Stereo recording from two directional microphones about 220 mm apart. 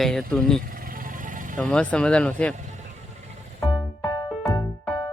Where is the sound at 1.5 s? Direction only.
5° left (ahead or behind).